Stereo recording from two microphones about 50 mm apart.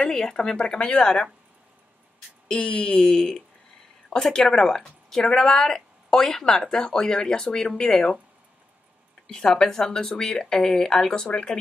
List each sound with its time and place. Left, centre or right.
0.0 s a woman's voice: centre
2.4 s a woman's voice: centre
9.3 s a woman's voice: centre
11.2 s speech: left